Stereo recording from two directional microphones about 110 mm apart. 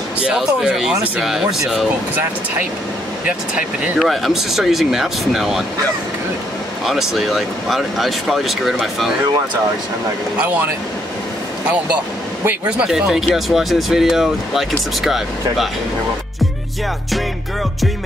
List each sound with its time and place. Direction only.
0.2 s speech: 5° right (ahead or behind)
3.3 s speech: 10° right (ahead or behind)
4.0 s speech: centre (ahead or behind)
6.9 s speech: centre (ahead or behind)
10.3 s speech: 15° right (ahead or behind)
12.4 s speech: 10° right (ahead or behind)